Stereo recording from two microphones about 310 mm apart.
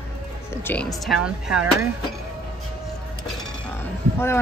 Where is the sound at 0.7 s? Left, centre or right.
Centre.